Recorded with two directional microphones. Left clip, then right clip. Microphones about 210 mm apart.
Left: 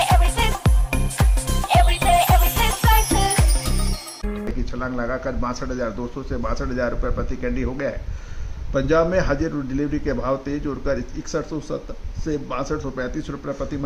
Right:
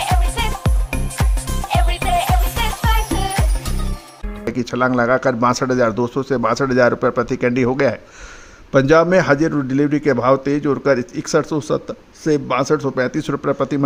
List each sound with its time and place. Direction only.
0.0 s music: centre (ahead or behind)
4.5 s a man's voice: 40° right (ahead or behind)